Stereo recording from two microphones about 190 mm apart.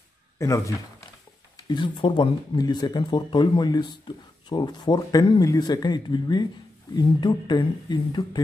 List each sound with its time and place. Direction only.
0.4 s speech: 15° left (ahead or behind)